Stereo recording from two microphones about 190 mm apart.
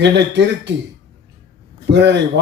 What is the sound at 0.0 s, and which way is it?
Speech, 65° right (ahead or behind).